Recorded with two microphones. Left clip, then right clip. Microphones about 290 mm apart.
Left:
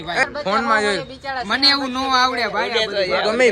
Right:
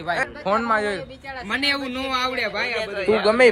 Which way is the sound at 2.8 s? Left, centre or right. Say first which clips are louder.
Left 5 dB; left.